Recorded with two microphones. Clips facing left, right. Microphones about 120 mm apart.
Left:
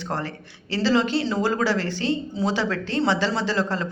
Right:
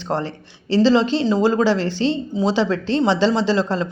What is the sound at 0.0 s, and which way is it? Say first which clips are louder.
Speech: right 5 dB; 25° right (ahead or behind).